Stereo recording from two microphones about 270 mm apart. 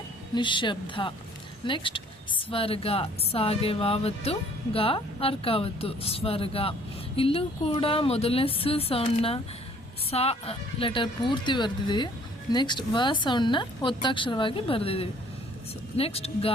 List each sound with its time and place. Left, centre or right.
0.3 s a woman's voice: centre